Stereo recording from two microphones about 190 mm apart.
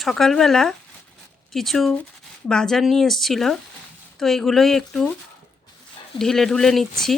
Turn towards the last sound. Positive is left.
turn(degrees=0)  # may be behind; listen again after turning